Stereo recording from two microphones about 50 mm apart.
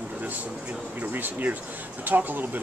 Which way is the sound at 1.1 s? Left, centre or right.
Right.